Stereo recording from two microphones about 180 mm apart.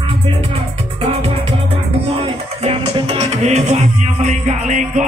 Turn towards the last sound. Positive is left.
turn(degrees=-40)  # may be behind; listen again after turning